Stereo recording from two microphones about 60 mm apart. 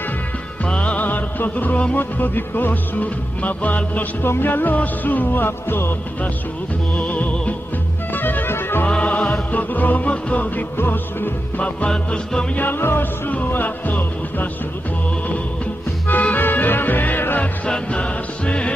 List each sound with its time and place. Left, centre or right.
0.7 s music: centre; by 5.9 s left
7.0 s music: left
8.8 s music: left
10.8 s music: left
11.9 s music: centre
12.5 s music: left
17.6 s music: centre